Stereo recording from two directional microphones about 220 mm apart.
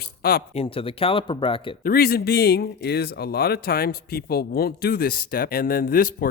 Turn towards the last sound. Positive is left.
turn(degrees=40)  # may be behind; listen again after turning